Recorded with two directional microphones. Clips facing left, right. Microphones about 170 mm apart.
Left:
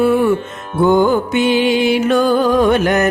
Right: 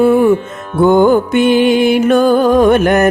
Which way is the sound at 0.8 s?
55° right (ahead or behind).